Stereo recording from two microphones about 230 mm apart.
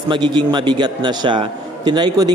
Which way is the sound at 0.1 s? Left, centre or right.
Centre.